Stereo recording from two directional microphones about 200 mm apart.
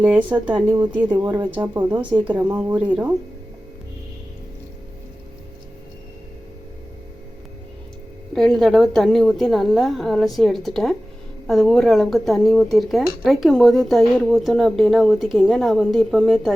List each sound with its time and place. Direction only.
0.0 s speech: 10° right (ahead or behind)
1.2 s speech: 20° right (ahead or behind)
8.4 s speech: centre (ahead or behind)